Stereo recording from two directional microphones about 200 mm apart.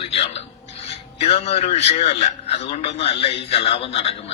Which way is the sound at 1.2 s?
30° left (ahead or behind).